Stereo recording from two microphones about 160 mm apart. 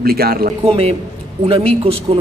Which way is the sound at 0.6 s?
35° right (ahead or behind).